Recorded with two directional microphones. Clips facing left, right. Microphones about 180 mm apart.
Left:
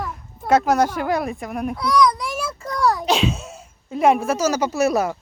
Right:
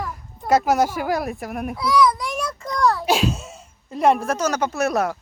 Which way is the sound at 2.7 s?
10° left (ahead or behind).